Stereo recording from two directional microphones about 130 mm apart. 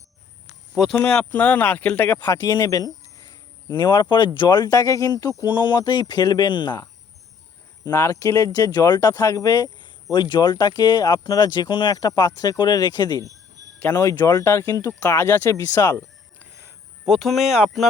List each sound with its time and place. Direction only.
0.8 s speech: 5° left (ahead or behind)
2.2 s speech: 25° left (ahead or behind)
5.4 s speech: 35° left (ahead or behind)
7.9 s speech: 20° left (ahead or behind)
17.1 s speech: centre (ahead or behind)